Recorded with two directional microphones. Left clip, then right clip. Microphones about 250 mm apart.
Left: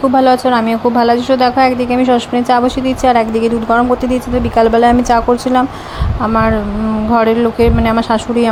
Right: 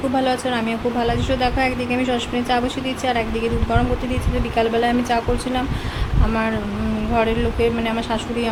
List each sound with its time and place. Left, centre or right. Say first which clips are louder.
0.2 s a woman's voice: left 11 dB; left
7.2 s a woman's voice: left 8 dB; left